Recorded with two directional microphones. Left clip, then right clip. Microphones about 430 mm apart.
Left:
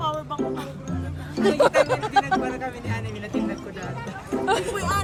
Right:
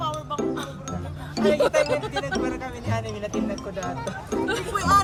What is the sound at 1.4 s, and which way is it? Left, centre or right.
Speech, centre.